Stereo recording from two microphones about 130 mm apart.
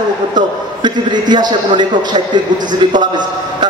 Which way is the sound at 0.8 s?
35° right (ahead or behind).